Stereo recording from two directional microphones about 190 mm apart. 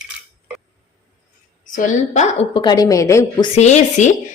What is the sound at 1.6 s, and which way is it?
Speech, 45° left (ahead or behind).